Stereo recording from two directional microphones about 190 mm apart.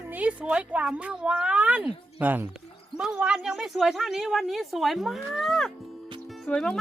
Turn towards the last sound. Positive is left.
turn(degrees=5)  # may be behind; listen again after turning